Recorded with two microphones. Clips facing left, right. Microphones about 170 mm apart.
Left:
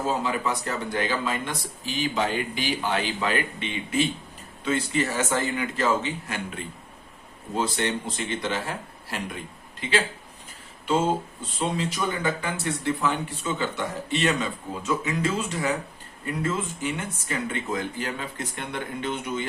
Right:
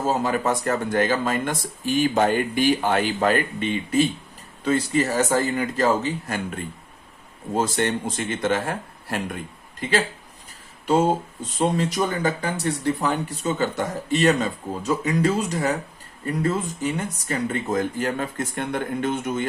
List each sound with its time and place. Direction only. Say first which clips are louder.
0.1 s speech: right 6 dB; 45° right (ahead or behind)
10.8 s speech: right 4 dB; 40° right (ahead or behind)